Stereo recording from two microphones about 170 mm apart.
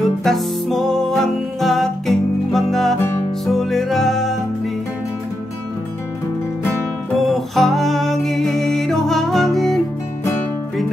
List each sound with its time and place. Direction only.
0.2 s music: centre (ahead or behind)
3.0 s music: 15° left (ahead or behind)
3.4 s music: centre (ahead or behind)
7.2 s music: centre (ahead or behind)